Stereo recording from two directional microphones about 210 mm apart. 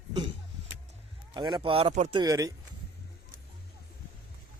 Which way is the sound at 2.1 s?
15° right (ahead or behind).